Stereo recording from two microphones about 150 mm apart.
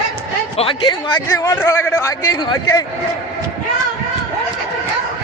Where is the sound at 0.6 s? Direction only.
35° left (ahead or behind).